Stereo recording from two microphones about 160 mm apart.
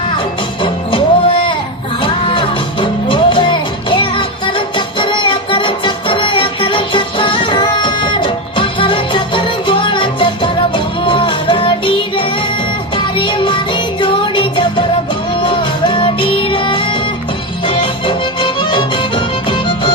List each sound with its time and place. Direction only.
0.6 s music: 30° left (ahead or behind)